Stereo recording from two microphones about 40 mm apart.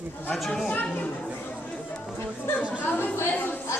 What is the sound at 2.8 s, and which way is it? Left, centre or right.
Speech, left.